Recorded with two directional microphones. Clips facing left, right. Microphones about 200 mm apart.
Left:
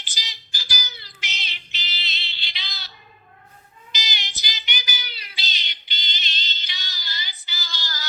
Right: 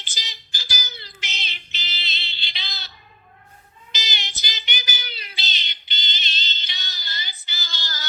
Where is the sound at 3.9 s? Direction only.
25° right (ahead or behind).